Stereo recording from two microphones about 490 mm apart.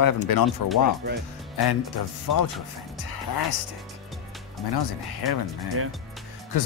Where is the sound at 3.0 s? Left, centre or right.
Left.